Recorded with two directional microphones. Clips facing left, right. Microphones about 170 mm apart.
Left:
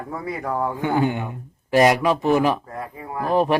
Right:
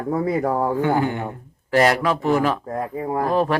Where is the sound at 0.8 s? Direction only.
20° left (ahead or behind).